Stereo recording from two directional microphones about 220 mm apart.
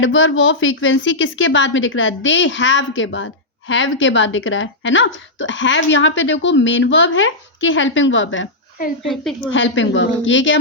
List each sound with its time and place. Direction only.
0.0 s a woman's voice: 60° left (ahead or behind)
9.0 s a woman's voice: centre (ahead or behind)
9.5 s a woman's voice: 60° left (ahead or behind)